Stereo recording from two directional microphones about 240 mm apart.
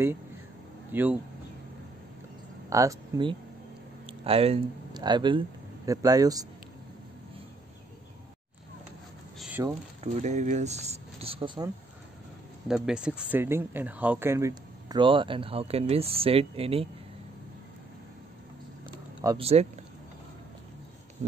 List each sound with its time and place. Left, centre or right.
0.9 s speech: centre
2.7 s speech: centre
9.4 s mechanisms: centre
10.1 s speech: right
12.6 s speech: centre; by 16.8 s right
19.2 s speech: right
21.2 s a sound: right